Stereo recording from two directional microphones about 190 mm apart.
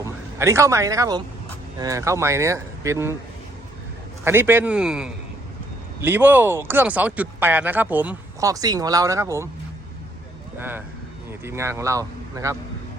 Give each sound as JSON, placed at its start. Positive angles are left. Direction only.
{"t": 0.3, "sound": "speech", "side_deg": -15}
{"t": 4.2, "sound": "a man's voice", "side_deg": -10}
{"t": 10.6, "sound": "speech", "side_deg": -10}